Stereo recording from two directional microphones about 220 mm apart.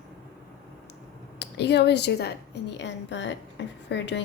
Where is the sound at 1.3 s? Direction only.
50° left (ahead or behind).